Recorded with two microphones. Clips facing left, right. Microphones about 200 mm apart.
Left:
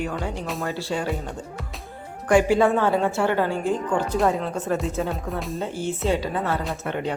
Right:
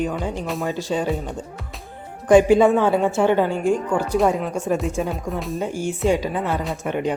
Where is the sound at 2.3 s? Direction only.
20° right (ahead or behind).